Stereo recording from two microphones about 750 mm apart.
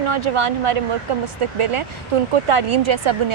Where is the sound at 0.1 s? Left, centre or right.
Right.